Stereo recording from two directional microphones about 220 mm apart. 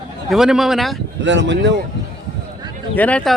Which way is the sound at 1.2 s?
55° right (ahead or behind).